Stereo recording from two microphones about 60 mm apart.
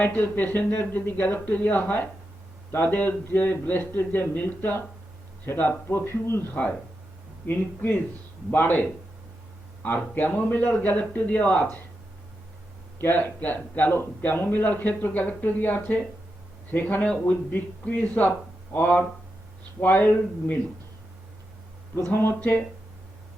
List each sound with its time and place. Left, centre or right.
0.0 s speech: left
7.4 s speech: left
13.0 s speech: left
22.1 s speech: left